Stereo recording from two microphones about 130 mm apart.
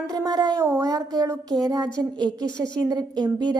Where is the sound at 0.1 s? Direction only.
30° right (ahead or behind).